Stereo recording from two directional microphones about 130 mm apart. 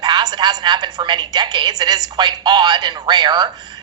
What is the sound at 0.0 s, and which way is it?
A woman's voice, 35° right (ahead or behind).